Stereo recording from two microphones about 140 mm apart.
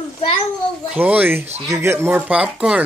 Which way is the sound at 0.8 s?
10° right (ahead or behind).